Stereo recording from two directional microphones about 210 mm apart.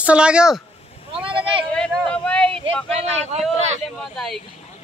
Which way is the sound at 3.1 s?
30° right (ahead or behind).